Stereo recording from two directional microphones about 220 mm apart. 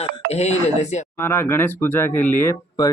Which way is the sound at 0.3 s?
30° left (ahead or behind).